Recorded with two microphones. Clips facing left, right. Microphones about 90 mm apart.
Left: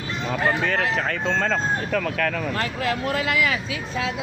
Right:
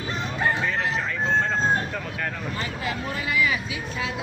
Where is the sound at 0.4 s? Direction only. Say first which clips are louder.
Left 2 dB; 80° left.